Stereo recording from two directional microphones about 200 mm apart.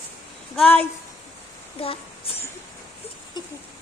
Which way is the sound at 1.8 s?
30° left (ahead or behind).